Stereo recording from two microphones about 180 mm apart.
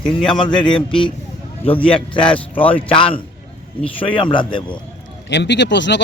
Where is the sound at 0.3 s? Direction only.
25° left (ahead or behind).